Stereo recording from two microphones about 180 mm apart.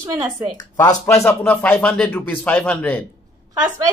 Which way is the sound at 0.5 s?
15° left (ahead or behind).